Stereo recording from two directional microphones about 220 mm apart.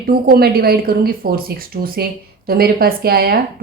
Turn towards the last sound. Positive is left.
turn(degrees=-45)  # may be behind; listen again after turning